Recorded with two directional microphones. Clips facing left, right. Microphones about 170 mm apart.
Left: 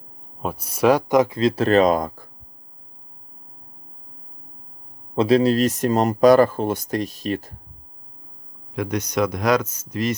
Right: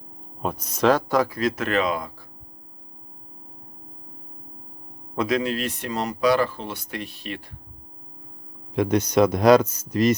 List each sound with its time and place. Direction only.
0.4 s speech: 10° left (ahead or behind); by 2.2 s 45° left (ahead or behind)
5.1 s speech: 30° left (ahead or behind)
8.7 s speech: 30° right (ahead or behind)